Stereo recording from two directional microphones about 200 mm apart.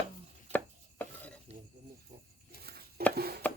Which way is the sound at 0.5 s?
10° left (ahead or behind).